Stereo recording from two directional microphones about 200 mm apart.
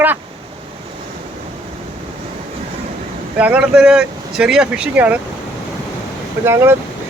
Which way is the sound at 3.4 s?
5° right (ahead or behind).